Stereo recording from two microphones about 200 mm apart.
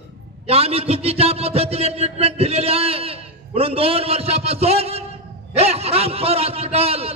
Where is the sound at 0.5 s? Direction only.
30° right (ahead or behind).